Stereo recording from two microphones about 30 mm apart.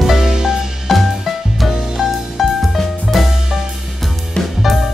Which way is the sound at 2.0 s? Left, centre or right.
Centre.